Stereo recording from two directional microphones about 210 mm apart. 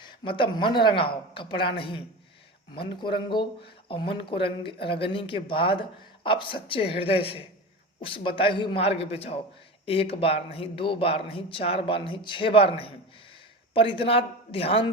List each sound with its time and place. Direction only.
0.0 s a man's voice: 25° left (ahead or behind)
13.7 s a man's voice: 25° left (ahead or behind)